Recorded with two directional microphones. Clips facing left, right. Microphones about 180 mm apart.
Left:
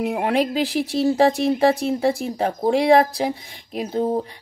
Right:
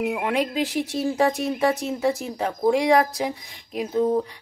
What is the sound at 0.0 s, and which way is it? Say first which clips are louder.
Speech: left 3 dB; 35° left (ahead or behind).